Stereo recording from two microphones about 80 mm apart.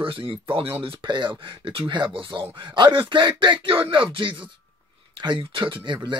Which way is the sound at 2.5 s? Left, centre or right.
Right.